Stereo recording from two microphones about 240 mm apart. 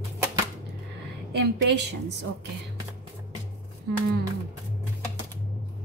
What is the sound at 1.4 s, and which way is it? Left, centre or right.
Speech, right.